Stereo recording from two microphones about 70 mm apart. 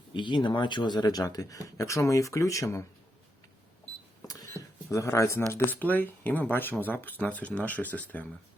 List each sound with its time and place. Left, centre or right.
0.4 s speech: left
4.4 s a sound: left
5.5 s speech: left